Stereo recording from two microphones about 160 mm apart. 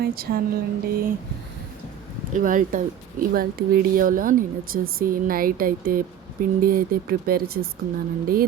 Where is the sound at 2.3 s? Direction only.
55° right (ahead or behind).